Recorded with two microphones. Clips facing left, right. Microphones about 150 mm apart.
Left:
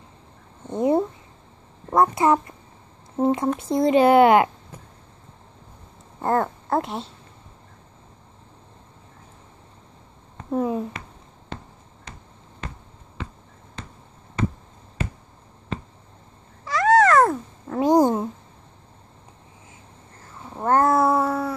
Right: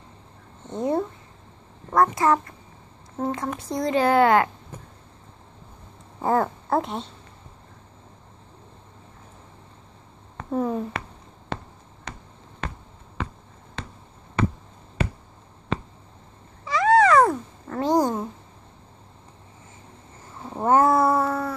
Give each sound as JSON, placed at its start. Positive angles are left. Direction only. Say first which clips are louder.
{"t": 0.7, "sound": "speech", "louder": "left 4 dB", "side_deg": 15}
{"t": 6.2, "sound": "speech", "louder": "even", "side_deg": 0}
{"t": 10.5, "sound": "speech", "louder": "left 1 dB", "side_deg": 5}
{"t": 11.4, "sound": "basketball bounce", "louder": "right 4 dB", "side_deg": -70}
{"t": 13.8, "sound": "basketball bounce", "louder": "right 3 dB", "side_deg": -70}
{"t": 15.7, "sound": "a sound", "louder": "right 3 dB", "side_deg": -80}
{"t": 16.6, "sound": "cat", "louder": "left 1 dB", "side_deg": 0}
{"t": 17.7, "sound": "a sound", "louder": "left 4 dB", "side_deg": 15}
{"t": 20.4, "sound": "babbling", "louder": "right 1 dB", "side_deg": -10}